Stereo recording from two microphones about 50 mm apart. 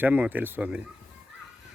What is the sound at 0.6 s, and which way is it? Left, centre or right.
Speech, right.